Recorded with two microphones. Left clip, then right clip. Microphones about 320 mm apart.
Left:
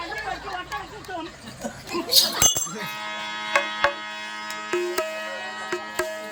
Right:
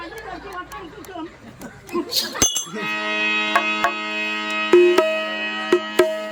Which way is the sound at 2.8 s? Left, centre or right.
Right.